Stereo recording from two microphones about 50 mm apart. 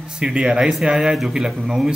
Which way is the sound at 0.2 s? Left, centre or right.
Centre.